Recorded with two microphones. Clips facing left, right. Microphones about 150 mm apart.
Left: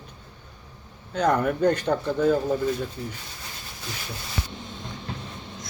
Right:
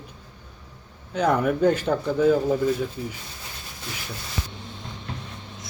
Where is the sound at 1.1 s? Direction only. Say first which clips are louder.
Right 1 dB; 5° right (ahead or behind).